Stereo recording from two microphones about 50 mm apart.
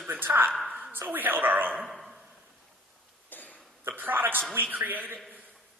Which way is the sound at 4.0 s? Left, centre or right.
Right.